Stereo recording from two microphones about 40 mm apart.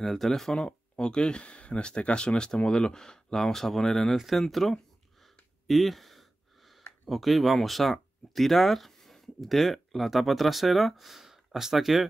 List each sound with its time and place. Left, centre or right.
0.0 s speech: centre